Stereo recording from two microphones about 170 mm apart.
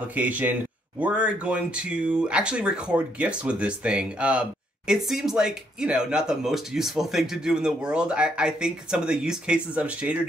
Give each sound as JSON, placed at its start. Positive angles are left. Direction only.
{"t": 0.1, "sound": "speech", "side_deg": -10}